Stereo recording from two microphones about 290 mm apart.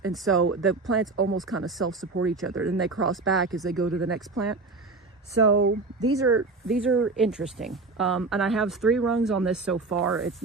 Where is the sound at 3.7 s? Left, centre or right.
Right.